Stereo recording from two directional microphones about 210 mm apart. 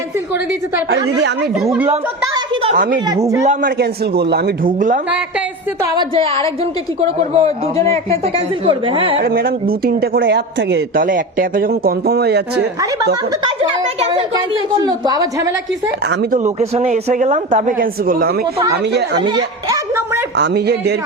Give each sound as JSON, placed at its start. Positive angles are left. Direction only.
{"t": 2.7, "sound": "speech", "side_deg": -40}
{"t": 5.8, "sound": "a woman's voice", "side_deg": -25}
{"t": 7.8, "sound": "speech", "side_deg": 15}
{"t": 8.2, "sound": "a woman's voice", "side_deg": -25}
{"t": 9.2, "sound": "speech", "side_deg": -45}
{"t": 11.0, "sound": "speech", "side_deg": -40}
{"t": 12.8, "sound": "a woman's voice", "side_deg": -20}
{"t": 16.0, "sound": "speech", "side_deg": -35}
{"t": 19.6, "sound": "a sound", "side_deg": -15}
{"t": 20.3, "sound": "speech", "side_deg": -50}